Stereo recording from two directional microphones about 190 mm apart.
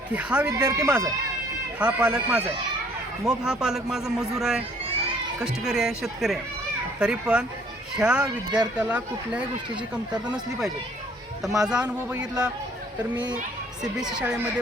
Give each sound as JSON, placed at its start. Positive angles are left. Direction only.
{"t": 0.1, "sound": "speech", "side_deg": -5}
{"t": 0.7, "sound": "speech", "side_deg": -15}
{"t": 1.8, "sound": "speech", "side_deg": -5}
{"t": 13.8, "sound": "speech", "side_deg": -5}